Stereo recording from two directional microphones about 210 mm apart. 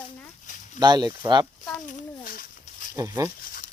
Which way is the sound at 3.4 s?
40° left (ahead or behind).